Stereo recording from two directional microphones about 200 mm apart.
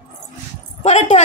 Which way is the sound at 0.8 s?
35° left (ahead or behind).